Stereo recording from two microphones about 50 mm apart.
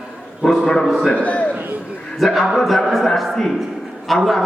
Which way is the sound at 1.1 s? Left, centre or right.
Left.